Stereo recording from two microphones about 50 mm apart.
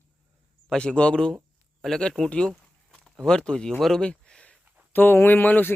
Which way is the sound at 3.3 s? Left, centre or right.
Centre.